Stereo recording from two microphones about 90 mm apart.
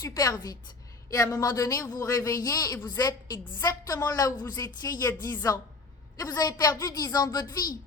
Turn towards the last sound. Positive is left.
turn(degrees=45)  # may be behind; listen again after turning